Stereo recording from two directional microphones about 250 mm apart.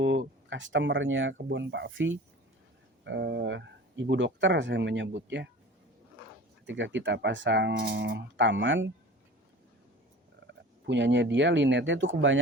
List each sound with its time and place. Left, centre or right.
0.0 s speech: right
6.7 s speech: right
10.4 s speech: right